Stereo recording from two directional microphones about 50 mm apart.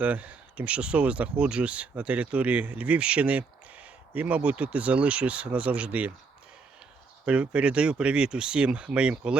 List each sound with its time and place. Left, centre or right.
0.0 s speech: right
7.3 s speech: right